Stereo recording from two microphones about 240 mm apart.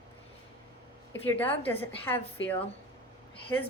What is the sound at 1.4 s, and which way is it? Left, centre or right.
A woman's voice, centre.